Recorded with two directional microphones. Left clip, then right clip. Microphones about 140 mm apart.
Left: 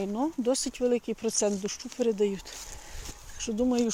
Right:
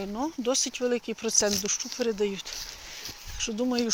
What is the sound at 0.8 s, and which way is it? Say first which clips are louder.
Speech: left 1 dB; 30° left (ahead or behind).